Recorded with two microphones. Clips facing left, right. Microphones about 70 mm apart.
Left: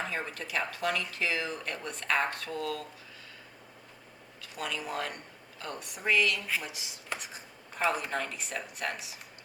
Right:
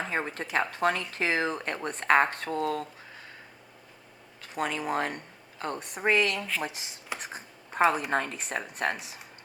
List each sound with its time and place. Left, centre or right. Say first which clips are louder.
0.1 s speech: right 5 dB; right
4.4 s speech: right 6 dB; right